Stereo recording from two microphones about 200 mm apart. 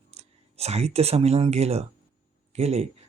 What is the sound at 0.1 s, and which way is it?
Speech, 30° right (ahead or behind).